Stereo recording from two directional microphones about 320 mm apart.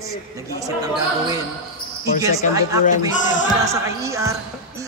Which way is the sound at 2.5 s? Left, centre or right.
Centre.